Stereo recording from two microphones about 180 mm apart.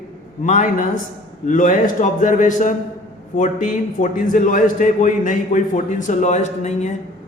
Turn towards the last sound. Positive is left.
turn(degrees=40)  # may be behind; listen again after turning